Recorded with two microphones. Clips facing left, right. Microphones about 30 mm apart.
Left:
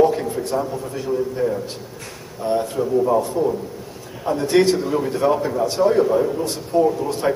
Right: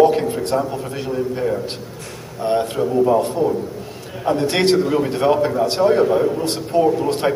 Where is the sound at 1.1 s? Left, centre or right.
Right.